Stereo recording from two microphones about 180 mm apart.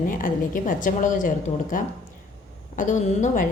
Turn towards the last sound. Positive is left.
turn(degrees=40)  # may be behind; listen again after turning